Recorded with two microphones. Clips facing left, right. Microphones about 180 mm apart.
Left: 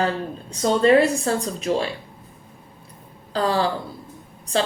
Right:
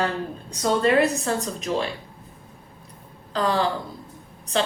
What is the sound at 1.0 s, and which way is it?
Speech, 30° left (ahead or behind).